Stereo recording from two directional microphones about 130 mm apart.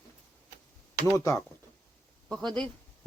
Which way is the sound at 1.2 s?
20° left (ahead or behind).